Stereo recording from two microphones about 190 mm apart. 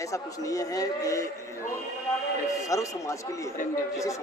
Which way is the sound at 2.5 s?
15° left (ahead or behind).